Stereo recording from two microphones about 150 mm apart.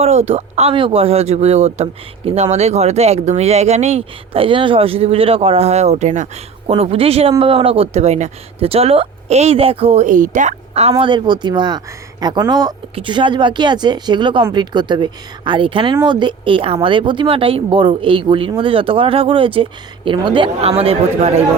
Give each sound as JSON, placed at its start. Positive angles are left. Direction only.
{"t": 0.0, "sound": "speech", "side_deg": -45}
{"t": 6.7, "sound": "speech", "side_deg": -40}